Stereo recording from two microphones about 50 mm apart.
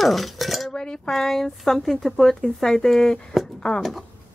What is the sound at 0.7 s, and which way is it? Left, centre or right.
Cutlery, centre.